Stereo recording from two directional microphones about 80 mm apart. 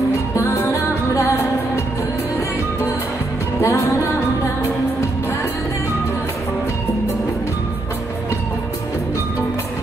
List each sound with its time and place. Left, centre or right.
0.4 s music: left
3.6 s music: left